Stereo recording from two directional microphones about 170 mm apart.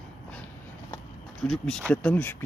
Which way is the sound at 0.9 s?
5° left (ahead or behind).